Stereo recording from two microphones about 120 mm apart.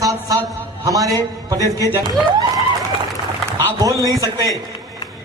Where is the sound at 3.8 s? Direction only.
30° right (ahead or behind).